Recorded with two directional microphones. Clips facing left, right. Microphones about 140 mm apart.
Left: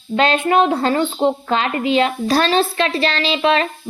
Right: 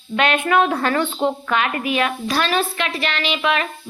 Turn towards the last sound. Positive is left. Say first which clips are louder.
# left 4 dB
turn(degrees=30)  # may be behind; listen again after turning